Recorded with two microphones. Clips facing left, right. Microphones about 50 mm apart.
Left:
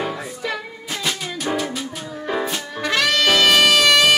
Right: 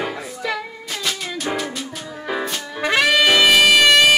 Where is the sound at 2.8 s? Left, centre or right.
Centre.